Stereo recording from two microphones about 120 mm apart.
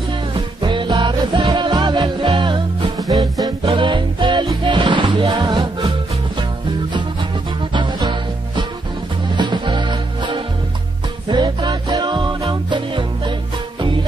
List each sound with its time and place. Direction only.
0.6 s music: 40° right (ahead or behind)
3.1 s music: 30° right (ahead or behind)
3.6 s music: 45° right (ahead or behind)
7.7 s music: 40° right (ahead or behind)